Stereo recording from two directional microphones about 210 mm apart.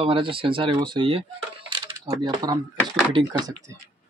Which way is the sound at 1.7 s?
20° right (ahead or behind).